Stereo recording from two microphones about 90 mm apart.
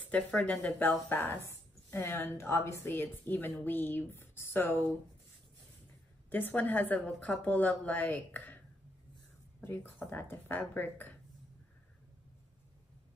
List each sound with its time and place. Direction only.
0.1 s a woman's voice: 10° left (ahead or behind)
6.3 s a woman's voice: 20° left (ahead or behind)
9.6 s a woman's voice: 20° left (ahead or behind)